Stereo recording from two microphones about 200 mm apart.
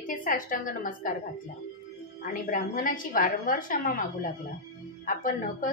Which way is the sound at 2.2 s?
40° left (ahead or behind).